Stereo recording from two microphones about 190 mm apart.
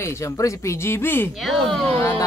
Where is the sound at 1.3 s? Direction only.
Centre (ahead or behind).